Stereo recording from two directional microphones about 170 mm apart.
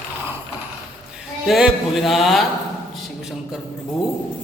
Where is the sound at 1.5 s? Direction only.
Centre (ahead or behind).